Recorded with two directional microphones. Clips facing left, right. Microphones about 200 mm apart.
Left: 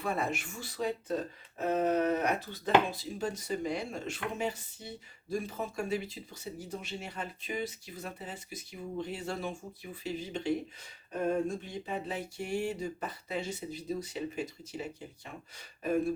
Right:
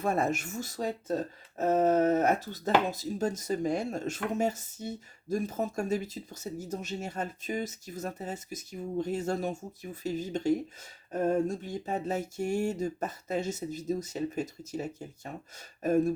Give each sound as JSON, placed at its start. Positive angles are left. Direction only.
{"t": 0.0, "sound": "speech", "side_deg": -45}